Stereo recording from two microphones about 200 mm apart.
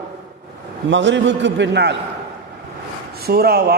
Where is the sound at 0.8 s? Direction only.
65° right (ahead or behind).